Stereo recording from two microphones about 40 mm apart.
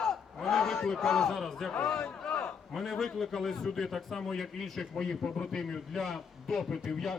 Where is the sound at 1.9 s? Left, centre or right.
Centre.